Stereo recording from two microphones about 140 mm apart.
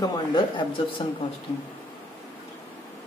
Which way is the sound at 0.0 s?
30° left (ahead or behind).